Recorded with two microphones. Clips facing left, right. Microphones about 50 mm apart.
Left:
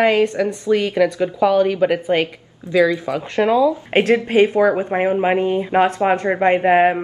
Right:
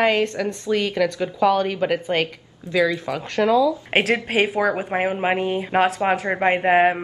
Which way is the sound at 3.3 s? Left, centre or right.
Left.